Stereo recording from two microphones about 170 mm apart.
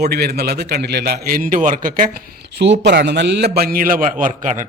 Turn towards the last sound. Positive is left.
turn(degrees=-50)  # may be behind; listen again after turning